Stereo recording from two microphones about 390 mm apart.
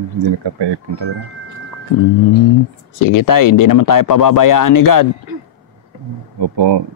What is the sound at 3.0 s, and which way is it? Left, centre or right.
Speech, left.